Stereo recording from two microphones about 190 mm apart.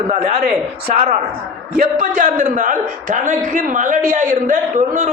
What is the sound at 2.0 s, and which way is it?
A man's voice, 45° right (ahead or behind).